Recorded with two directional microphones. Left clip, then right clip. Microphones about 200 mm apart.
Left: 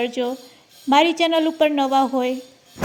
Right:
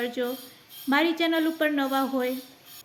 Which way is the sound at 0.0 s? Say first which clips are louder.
Left 6 dB; 25° left (ahead or behind).